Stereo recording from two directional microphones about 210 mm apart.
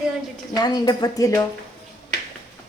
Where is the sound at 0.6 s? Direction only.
20° left (ahead or behind).